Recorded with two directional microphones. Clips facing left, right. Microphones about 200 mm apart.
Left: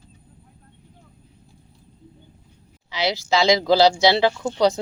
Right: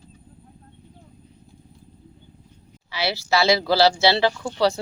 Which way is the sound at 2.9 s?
15° left (ahead or behind).